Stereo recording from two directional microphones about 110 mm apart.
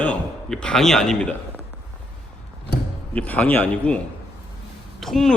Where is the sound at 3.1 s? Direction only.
10° left (ahead or behind).